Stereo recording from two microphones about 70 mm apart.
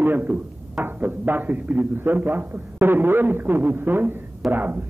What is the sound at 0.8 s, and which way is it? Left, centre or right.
A man's voice, right.